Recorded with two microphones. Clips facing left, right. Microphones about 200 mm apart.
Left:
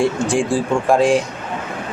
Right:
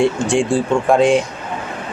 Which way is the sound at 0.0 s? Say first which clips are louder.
Right 2 dB; centre (ahead or behind).